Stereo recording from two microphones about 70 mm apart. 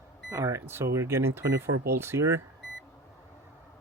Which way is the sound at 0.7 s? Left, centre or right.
Right.